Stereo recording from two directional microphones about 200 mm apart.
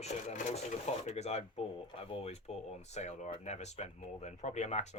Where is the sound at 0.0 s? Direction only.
35° left (ahead or behind).